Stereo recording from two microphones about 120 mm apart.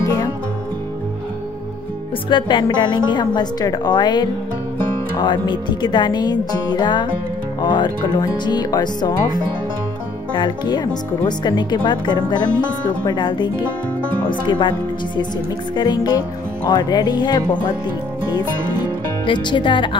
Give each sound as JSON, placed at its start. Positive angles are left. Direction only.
{"t": 0.0, "sound": "music", "side_deg": 30}
{"t": 2.2, "sound": "a woman's voice", "side_deg": 40}
{"t": 19.2, "sound": "a woman's voice", "side_deg": 40}